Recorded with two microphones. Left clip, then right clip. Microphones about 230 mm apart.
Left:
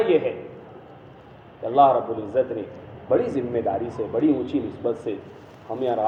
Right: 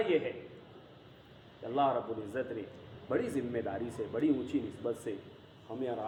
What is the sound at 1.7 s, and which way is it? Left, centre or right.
Speech, right.